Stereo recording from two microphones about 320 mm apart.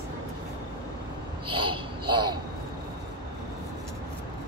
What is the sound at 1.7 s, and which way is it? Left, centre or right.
Speech, centre.